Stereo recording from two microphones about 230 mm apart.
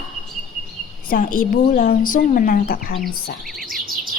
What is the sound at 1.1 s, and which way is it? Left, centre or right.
A woman's voice, left.